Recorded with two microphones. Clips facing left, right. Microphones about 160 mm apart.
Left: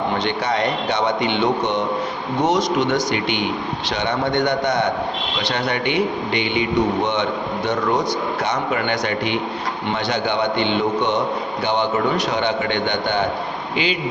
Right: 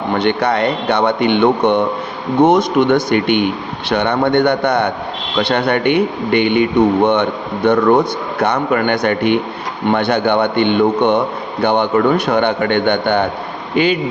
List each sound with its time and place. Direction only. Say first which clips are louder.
0.2 s speech: right 6 dB; 60° right (ahead or behind)